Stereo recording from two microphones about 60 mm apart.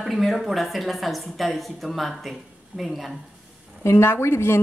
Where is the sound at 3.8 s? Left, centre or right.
Left.